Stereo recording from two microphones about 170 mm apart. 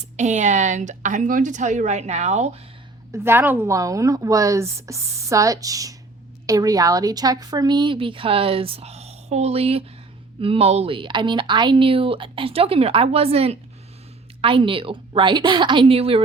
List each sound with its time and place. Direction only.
0.2 s a woman's voice: 45° right (ahead or behind)
3.1 s a woman's voice: 15° right (ahead or behind); by 16.2 s 35° right (ahead or behind)